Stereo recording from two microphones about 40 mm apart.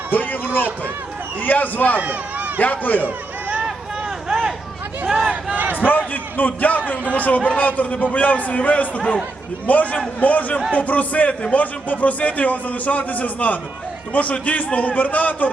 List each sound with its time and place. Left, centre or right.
0.1 s run: left
1.4 s a man's voice: left
2.0 s speech: right
2.6 s a man's voice: left
4.3 s a sound: centre
5.3 s battle cry: right
5.7 s a man's voice: left